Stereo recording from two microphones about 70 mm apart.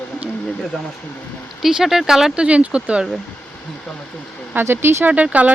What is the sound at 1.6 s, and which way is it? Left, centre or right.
Speech, centre.